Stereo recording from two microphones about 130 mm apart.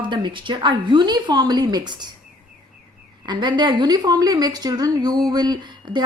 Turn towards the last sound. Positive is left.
turn(degrees=-35)  # may be behind; listen again after turning